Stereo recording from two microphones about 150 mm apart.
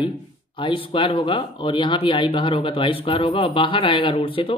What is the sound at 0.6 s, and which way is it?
Speech, 35° left (ahead or behind).